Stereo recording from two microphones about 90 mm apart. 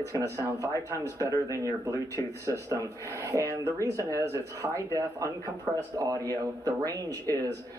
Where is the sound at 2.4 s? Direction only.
35° right (ahead or behind).